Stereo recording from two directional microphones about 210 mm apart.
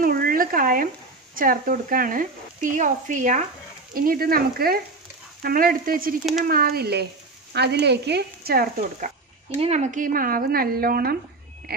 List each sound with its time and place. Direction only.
0.0 s a sound: 45° right (ahead or behind)
1.3 s speech: 40° right (ahead or behind)
9.6 s speech: 30° right (ahead or behind)